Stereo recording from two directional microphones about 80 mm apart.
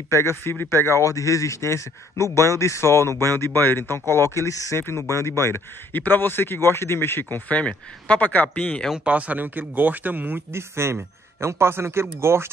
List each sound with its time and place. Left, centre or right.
0.1 s a man's voice: left; by 8.9 s centre
8.9 s speech: centre; by 12.4 s right